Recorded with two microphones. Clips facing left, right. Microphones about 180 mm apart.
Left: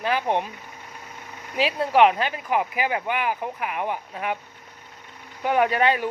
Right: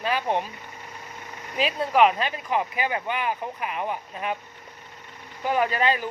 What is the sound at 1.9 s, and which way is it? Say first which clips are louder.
Speech: left 2 dB; 20° left (ahead or behind).